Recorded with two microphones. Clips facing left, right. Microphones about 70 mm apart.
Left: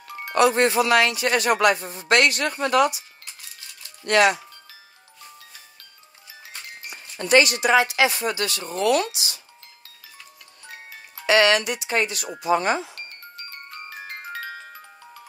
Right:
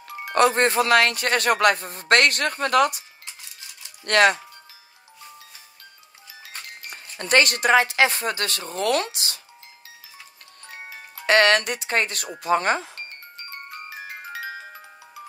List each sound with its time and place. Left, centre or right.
0.0 s music: centre
0.3 s speech: right
4.0 s speech: right
6.9 s speech: right
11.2 s speech: right
12.9 s music: right
13.7 s music: centre